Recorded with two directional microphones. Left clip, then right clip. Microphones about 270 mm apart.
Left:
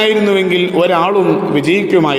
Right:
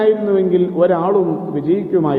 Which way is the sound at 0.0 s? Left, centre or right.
Left.